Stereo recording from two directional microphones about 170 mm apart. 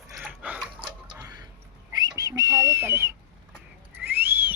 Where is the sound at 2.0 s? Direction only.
20° right (ahead or behind).